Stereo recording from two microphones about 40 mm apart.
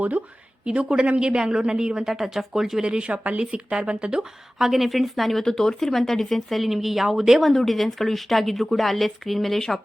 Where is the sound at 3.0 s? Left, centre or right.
Right.